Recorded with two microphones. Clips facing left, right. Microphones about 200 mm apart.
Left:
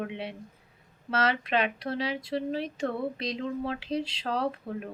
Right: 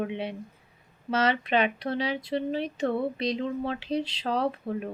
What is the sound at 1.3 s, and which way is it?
A woman's voice, centre (ahead or behind).